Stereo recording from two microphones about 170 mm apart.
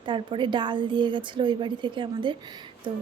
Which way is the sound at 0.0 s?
30° right (ahead or behind).